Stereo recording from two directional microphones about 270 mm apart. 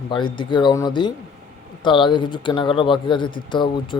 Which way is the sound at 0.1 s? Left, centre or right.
Centre.